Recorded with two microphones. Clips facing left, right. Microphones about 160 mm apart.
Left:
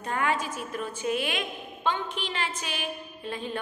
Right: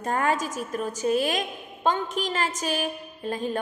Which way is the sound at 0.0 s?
40° right (ahead or behind).